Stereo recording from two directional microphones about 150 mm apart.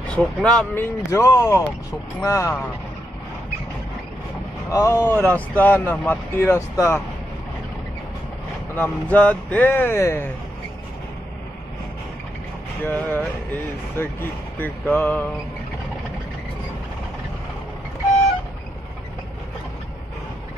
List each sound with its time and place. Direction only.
0.1 s speech: 5° left (ahead or behind)
1.1 s speech: 20° left (ahead or behind)
4.6 s speech: 20° left (ahead or behind)
8.7 s speech: 10° left (ahead or behind)
12.8 s speech: 15° left (ahead or behind)